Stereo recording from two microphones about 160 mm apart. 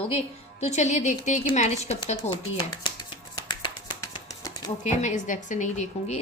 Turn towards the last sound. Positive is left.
turn(degrees=50)  # may be behind; listen again after turning